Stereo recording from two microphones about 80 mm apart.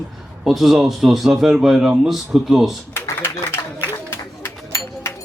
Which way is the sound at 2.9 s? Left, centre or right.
Left.